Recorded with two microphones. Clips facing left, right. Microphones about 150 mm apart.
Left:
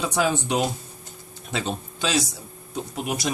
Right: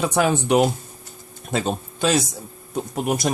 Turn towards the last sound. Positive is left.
turn(degrees=-50)  # may be behind; listen again after turning